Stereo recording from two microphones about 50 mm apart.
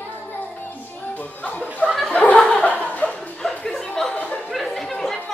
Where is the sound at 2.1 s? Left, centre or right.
Left.